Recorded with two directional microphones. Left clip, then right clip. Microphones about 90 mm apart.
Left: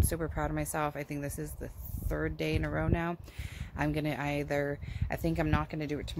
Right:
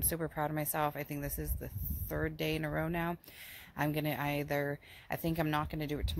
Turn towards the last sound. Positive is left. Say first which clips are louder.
# left 2 dB
turn(degrees=20)  # may be behind; listen again after turning